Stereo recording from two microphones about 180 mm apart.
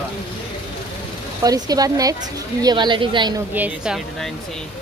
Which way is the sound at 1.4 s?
20° right (ahead or behind).